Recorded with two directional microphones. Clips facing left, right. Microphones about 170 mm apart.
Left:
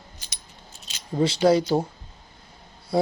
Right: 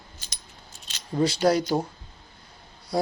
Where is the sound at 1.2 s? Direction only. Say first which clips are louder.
Left 2 dB; 25° left (ahead or behind).